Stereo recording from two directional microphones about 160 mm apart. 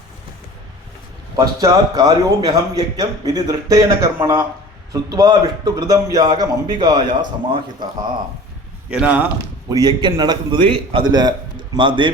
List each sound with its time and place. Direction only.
1.4 s a man's voice: 20° right (ahead or behind)
8.9 s a man's voice: 10° right (ahead or behind)
9.6 s a man's voice: 25° right (ahead or behind)